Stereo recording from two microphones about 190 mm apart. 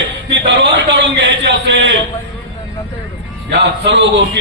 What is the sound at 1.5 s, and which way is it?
Speech, 70° right (ahead or behind).